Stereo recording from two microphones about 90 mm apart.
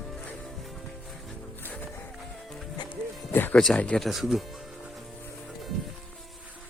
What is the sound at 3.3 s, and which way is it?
Music, 20° left (ahead or behind).